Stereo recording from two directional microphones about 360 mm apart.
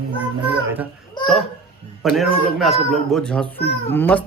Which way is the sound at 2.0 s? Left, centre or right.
Centre.